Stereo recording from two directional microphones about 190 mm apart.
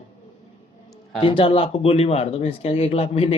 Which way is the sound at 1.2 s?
25° left (ahead or behind).